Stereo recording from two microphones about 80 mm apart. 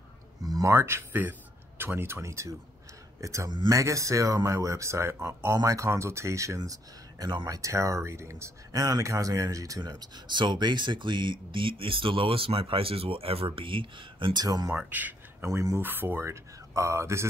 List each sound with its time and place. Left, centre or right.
0.4 s a sound: right
1.8 s speech: right
3.4 s speech: right
3.7 s speech: right
8.7 s speech: right
9.8 s speech: right
14.4 s speech: right
14.7 s speech: right
15.4 s speech: right
15.8 s speech: right
16.3 s speech: right